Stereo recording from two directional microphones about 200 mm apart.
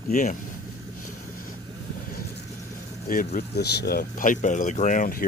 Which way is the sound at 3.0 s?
45° left (ahead or behind).